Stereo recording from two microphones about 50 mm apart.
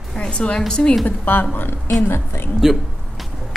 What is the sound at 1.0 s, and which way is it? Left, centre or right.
Speech, left.